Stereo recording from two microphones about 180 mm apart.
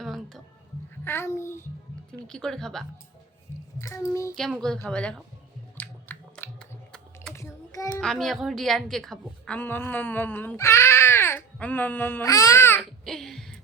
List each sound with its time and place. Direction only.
0.0 s music: centre (ahead or behind)
1.0 s a woman's voice: 15° left (ahead or behind)
2.1 s a woman's voice: 5° left (ahead or behind)
3.8 s a woman's voice: 15° left (ahead or behind)
4.4 s a woman's voice: centre (ahead or behind)
5.7 s a sound: 10° left (ahead or behind)
7.3 s child singing: 15° left (ahead or behind)
7.9 s a woman's voice: 5° left (ahead or behind)
13.1 s a sound: centre (ahead or behind)